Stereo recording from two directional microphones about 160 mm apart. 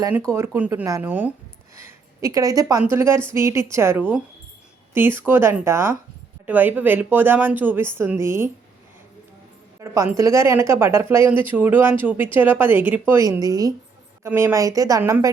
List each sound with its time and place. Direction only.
0.3 s a woman's voice: 15° right (ahead or behind)
9.8 s a woman's voice: 15° right (ahead or behind)